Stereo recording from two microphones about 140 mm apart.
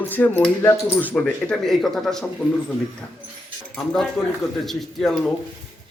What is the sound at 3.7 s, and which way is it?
Speech, 5° left (ahead or behind).